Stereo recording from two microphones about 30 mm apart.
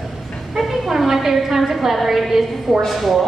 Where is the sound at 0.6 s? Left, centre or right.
Centre.